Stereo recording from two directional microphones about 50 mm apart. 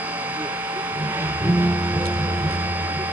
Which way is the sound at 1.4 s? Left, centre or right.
Right.